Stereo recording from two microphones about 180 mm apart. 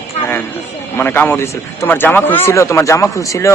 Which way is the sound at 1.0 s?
10° left (ahead or behind).